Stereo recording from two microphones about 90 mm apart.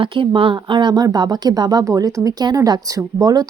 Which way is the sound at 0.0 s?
70° right (ahead or behind).